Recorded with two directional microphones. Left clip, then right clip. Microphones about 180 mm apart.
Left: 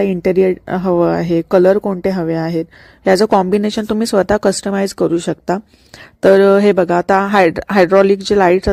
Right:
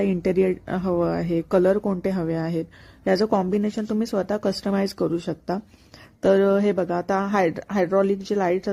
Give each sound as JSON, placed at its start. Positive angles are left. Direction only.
{"t": 0.0, "sound": "speech", "side_deg": 30}